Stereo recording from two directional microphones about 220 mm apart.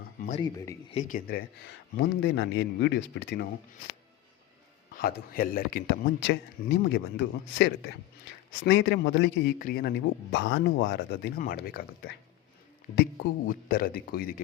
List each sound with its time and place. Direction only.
0.3 s speech: 25° left (ahead or behind)
0.5 s speech: 15° left (ahead or behind)
0.9 s a man's voice: 35° left (ahead or behind)
4.9 s a man's voice: 40° left (ahead or behind)
13.5 s speech: 40° left (ahead or behind)